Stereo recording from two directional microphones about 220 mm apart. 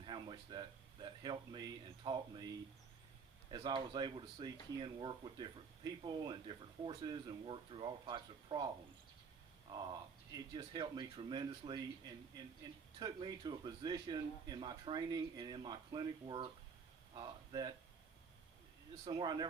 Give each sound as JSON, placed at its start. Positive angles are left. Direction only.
{"t": 0.0, "sound": "a man's voice", "side_deg": -20}
{"t": 3.5, "sound": "speech", "side_deg": -20}
{"t": 19.0, "sound": "speech", "side_deg": -20}